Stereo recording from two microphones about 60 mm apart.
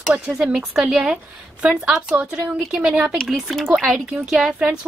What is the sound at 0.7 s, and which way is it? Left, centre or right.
A woman's voice, centre.